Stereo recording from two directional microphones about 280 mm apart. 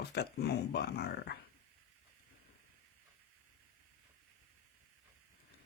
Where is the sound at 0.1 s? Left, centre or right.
Left.